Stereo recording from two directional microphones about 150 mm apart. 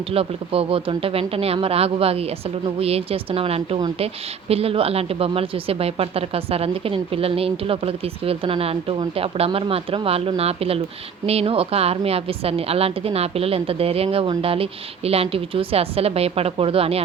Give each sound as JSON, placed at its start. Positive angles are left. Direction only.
{"t": 0.1, "sound": "speech", "side_deg": -40}